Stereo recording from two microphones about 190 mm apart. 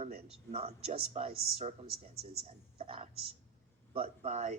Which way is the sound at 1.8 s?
55° right (ahead or behind).